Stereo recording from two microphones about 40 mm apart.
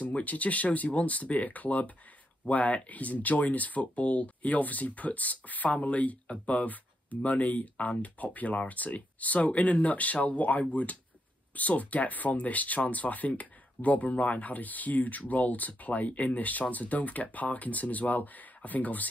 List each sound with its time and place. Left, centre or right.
0.0 s speech: left